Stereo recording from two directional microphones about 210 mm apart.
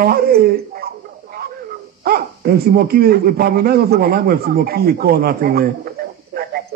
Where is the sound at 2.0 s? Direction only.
45° right (ahead or behind).